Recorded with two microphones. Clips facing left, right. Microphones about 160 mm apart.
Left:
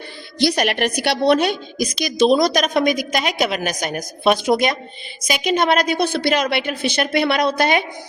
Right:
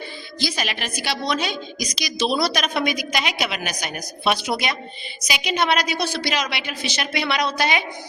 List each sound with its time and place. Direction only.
0.3 s a woman's voice: 65° left (ahead or behind)